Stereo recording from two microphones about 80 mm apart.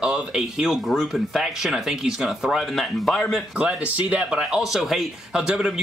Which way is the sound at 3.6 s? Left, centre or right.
Centre.